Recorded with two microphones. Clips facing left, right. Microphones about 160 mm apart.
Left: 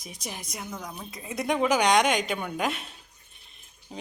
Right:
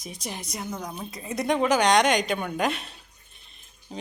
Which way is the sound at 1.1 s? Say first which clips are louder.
Right 2 dB; 5° left (ahead or behind).